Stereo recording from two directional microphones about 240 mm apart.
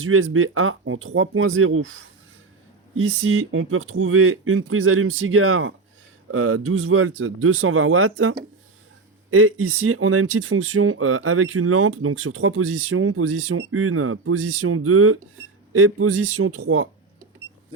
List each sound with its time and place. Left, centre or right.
0.0 s speech: right